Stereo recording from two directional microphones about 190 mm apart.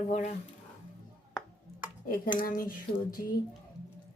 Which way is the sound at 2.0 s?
45° left (ahead or behind).